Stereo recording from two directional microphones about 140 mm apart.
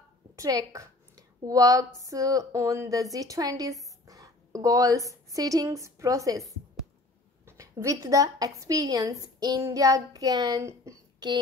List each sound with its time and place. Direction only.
0.4 s a woman's voice: 25° right (ahead or behind)